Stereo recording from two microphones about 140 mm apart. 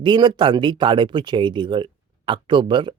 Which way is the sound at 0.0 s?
35° right (ahead or behind).